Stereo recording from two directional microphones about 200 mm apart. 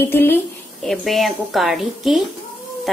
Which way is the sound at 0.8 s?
Centre (ahead or behind).